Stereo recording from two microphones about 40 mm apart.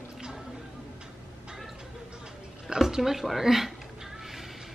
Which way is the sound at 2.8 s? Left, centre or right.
Centre.